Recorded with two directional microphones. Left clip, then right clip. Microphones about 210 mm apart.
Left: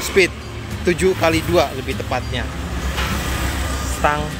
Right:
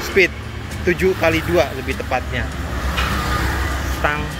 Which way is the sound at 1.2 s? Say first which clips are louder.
Even; 20° left (ahead or behind).